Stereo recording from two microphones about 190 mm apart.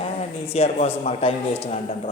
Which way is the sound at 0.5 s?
35° left (ahead or behind).